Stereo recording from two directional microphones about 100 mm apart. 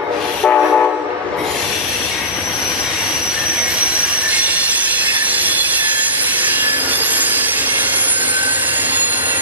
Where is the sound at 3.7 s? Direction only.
10° right (ahead or behind).